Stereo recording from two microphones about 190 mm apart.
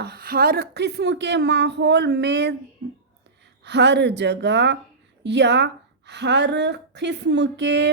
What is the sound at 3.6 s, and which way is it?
A woman's voice, 65° right (ahead or behind).